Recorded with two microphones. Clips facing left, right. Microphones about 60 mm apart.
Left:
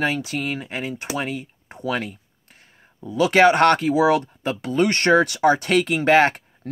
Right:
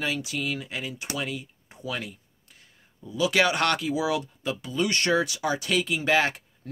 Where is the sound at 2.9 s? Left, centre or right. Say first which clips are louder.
Left 7 dB; left.